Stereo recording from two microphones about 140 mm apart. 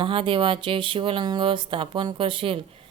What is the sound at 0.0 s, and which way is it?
Speech, 40° right (ahead or behind).